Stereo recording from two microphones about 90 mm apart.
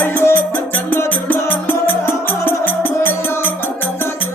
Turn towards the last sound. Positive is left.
turn(degrees=25)  # may be behind; listen again after turning